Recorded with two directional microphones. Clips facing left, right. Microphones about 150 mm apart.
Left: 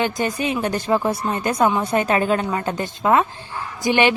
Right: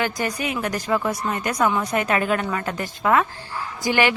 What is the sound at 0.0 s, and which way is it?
A woman's voice, 25° left (ahead or behind).